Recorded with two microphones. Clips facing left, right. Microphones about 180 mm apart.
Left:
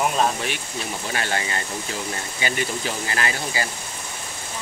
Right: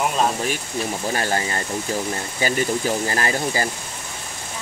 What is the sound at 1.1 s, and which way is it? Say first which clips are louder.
Speech: right 1 dB; 40° right (ahead or behind).